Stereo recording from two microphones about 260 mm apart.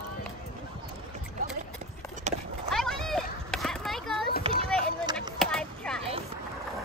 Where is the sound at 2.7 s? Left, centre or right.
Centre.